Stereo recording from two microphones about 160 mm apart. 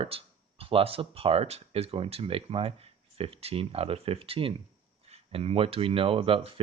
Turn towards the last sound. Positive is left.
turn(degrees=-35)  # may be behind; listen again after turning